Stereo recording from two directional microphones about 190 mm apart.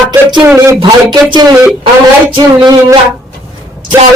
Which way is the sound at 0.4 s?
10° right (ahead or behind).